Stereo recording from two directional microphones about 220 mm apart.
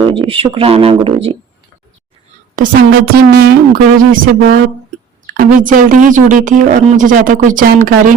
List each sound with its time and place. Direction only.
0.0 s speech: 25° right (ahead or behind)
2.6 s a woman's voice: 45° right (ahead or behind)